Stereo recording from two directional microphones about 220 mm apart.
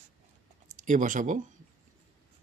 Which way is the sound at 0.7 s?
35° right (ahead or behind).